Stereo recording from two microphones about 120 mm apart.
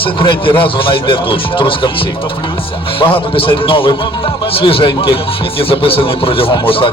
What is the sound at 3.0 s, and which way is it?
A man's voice, 50° left (ahead or behind).